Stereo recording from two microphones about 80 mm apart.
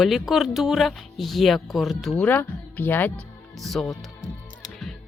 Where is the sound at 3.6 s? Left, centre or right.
Centre.